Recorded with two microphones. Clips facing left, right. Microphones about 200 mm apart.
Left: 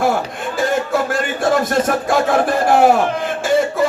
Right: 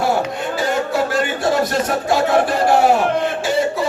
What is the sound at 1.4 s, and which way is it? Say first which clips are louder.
Speech: left 4 dB; 50° left (ahead or behind).